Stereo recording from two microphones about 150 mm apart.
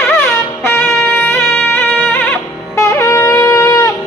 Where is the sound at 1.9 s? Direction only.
5° left (ahead or behind).